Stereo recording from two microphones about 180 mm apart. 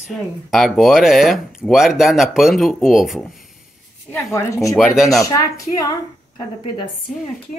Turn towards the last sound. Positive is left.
turn(degrees=20)  # may be behind; listen again after turning